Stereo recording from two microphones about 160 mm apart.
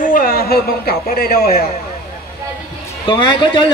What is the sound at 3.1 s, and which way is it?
Speech, 30° left (ahead or behind).